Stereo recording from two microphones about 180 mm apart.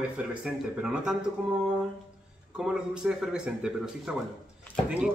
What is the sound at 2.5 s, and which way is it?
Speech, 5° right (ahead or behind).